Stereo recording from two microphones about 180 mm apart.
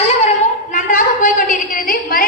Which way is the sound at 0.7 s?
50° left (ahead or behind).